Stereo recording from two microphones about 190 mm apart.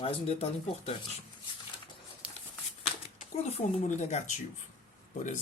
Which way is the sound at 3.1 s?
40° left (ahead or behind).